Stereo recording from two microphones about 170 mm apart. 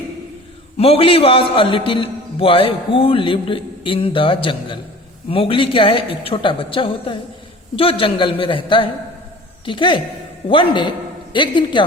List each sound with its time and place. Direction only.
0.8 s a man's voice: 35° left (ahead or behind)